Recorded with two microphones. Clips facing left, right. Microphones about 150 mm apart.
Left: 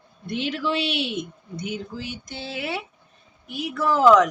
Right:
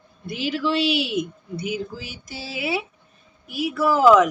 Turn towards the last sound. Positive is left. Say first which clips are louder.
# right 1 dB
turn(degrees=-5)  # may be behind; listen again after turning